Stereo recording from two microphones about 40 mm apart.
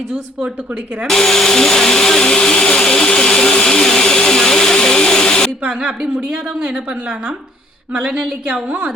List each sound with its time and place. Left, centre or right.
1.0 s speech: centre
2.2 s vacuum cleaner: left
5.6 s a woman's voice: right
8.0 s a woman's voice: right